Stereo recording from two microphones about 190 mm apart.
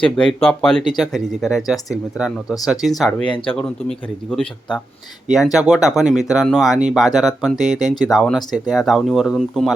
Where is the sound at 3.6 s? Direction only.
5° left (ahead or behind).